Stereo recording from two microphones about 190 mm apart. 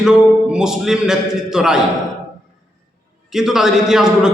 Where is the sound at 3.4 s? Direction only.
Centre (ahead or behind).